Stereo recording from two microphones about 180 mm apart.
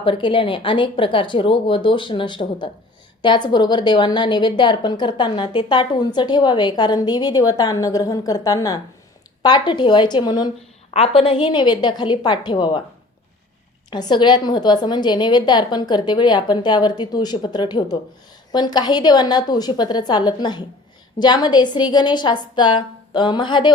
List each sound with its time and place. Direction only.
0.0 s a woman's voice: 30° left (ahead or behind)
13.9 s a woman's voice: 25° left (ahead or behind)